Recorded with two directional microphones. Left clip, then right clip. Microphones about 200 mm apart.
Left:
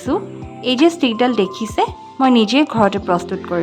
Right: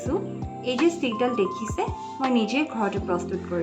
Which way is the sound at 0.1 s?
50° left (ahead or behind).